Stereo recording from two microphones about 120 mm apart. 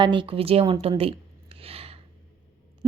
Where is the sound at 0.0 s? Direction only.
45° right (ahead or behind).